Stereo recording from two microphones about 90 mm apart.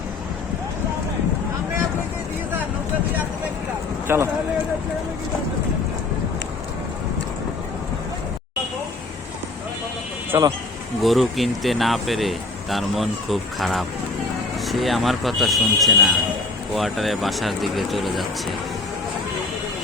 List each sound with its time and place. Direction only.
4.0 s speech: 25° right (ahead or behind)
10.3 s speech: 40° right (ahead or behind)
11.0 s speech: centre (ahead or behind)